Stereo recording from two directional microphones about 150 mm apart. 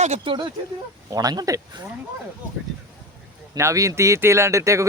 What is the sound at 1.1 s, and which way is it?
Speech, 25° right (ahead or behind).